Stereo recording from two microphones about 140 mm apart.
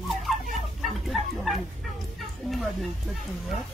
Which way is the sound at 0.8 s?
Centre (ahead or behind).